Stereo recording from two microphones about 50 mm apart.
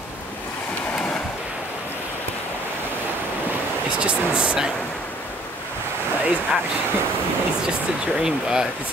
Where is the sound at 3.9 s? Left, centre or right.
Right.